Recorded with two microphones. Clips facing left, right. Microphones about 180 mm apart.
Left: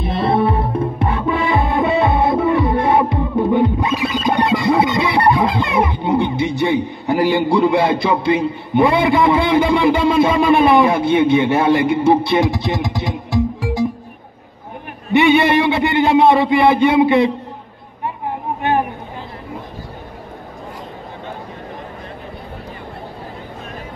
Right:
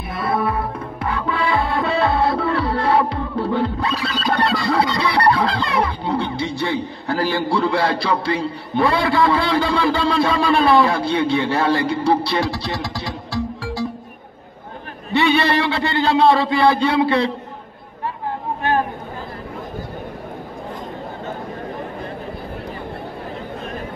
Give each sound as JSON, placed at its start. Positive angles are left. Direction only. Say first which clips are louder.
{"t": 0.0, "sound": "music", "louder": "left 5 dB", "side_deg": 25}
{"t": 15.1, "sound": "a man's voice", "louder": "left 5 dB", "side_deg": 20}
{"t": 18.6, "sound": "a sound", "louder": "left 2 dB", "side_deg": 20}